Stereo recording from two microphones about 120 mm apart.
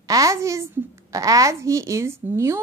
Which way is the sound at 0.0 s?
30° right (ahead or behind).